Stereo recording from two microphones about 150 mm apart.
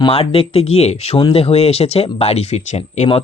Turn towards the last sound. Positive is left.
turn(degrees=45)  # may be behind; listen again after turning